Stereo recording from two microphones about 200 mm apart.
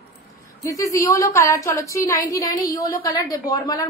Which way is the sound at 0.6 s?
15° left (ahead or behind).